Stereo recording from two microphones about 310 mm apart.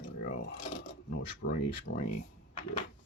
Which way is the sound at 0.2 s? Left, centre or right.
Left.